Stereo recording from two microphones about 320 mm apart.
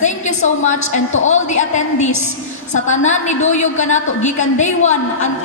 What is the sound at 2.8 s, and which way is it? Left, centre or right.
A woman's voice, left.